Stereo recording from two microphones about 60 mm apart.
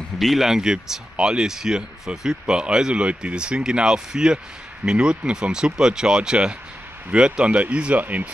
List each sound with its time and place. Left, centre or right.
0.2 s speech: centre; by 8.3 s right